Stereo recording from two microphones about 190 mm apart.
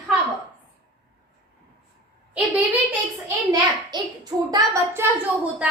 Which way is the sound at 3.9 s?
20° right (ahead or behind).